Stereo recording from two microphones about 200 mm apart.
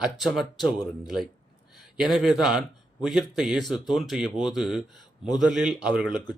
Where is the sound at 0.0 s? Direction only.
Centre (ahead or behind).